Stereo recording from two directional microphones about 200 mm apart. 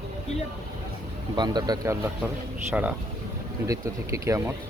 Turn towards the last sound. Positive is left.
turn(degrees=-15)  # may be behind; listen again after turning